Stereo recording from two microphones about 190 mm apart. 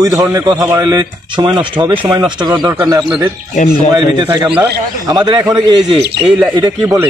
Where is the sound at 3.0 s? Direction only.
5° right (ahead or behind).